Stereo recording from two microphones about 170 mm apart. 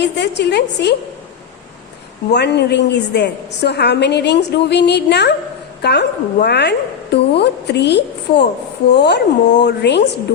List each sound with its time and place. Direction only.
0.0 s a woman's voice: 85° left
2.3 s a woman's voice: 80° left